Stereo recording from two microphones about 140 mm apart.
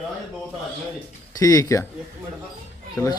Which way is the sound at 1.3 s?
25° left (ahead or behind).